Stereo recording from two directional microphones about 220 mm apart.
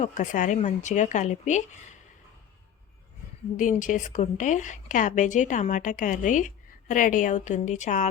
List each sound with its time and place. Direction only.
0.0 s a woman's voice: 35° left (ahead or behind)
3.6 s a woman's voice: 35° left (ahead or behind)